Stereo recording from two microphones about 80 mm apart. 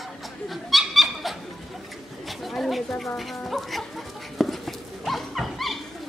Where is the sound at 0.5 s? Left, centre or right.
Centre.